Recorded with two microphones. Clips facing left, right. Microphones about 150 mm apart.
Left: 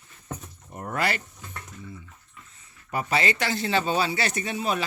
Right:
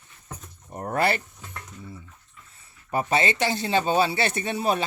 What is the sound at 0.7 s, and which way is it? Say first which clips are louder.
Speech: right 4 dB; 35° right (ahead or behind).